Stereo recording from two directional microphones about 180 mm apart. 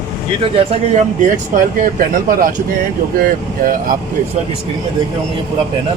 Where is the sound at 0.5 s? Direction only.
30° right (ahead or behind).